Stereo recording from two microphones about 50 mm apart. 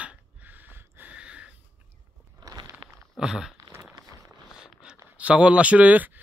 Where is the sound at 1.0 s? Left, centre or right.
Right.